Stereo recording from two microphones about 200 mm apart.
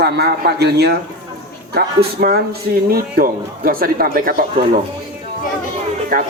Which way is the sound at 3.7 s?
45° right (ahead or behind).